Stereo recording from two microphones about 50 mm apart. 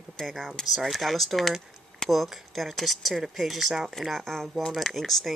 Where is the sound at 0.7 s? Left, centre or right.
Centre.